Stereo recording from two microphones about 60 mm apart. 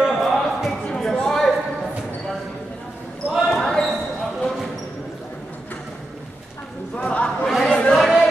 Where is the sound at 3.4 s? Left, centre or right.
Centre.